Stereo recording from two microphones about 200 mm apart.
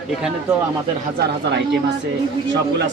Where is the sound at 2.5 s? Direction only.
60° right (ahead or behind).